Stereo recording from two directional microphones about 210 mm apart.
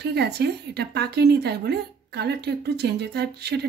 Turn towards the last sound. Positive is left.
turn(degrees=-50)  # may be behind; listen again after turning